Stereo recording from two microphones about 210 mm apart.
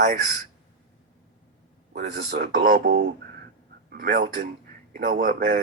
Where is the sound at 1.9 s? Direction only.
40° right (ahead or behind).